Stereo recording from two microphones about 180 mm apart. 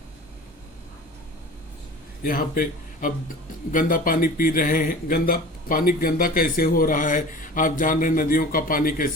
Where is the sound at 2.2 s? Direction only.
50° left (ahead or behind).